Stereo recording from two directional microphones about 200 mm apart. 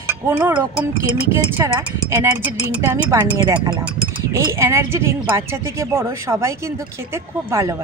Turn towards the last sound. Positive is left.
turn(degrees=-15)  # may be behind; listen again after turning